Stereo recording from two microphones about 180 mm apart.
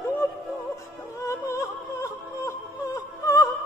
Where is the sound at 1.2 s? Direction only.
15° left (ahead or behind).